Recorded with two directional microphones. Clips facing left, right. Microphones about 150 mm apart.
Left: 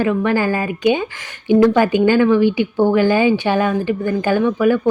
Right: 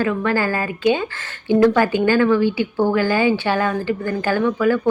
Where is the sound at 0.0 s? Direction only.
20° left (ahead or behind).